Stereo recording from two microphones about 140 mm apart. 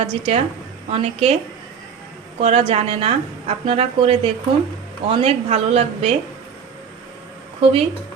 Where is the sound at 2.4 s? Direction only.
45° right (ahead or behind).